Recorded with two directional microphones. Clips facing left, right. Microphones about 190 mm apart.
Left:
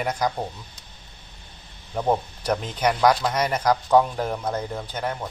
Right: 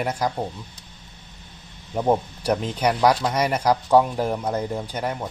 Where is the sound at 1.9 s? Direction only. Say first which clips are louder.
Right 2 dB; 10° right (ahead or behind).